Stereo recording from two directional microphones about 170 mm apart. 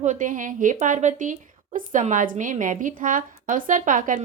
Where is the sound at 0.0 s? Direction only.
50° right (ahead or behind).